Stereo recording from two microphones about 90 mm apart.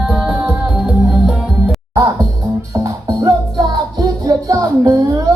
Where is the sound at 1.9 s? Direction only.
45° right (ahead or behind).